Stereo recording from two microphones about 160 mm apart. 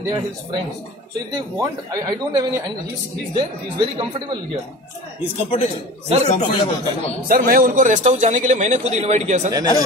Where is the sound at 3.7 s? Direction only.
30° right (ahead or behind).